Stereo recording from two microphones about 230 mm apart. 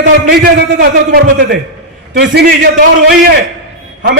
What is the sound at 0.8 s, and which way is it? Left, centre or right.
A man's voice, right.